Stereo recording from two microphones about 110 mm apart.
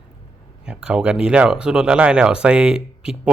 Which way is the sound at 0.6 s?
10° right (ahead or behind).